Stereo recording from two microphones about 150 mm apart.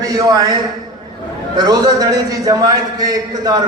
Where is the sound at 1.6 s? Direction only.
25° right (ahead or behind).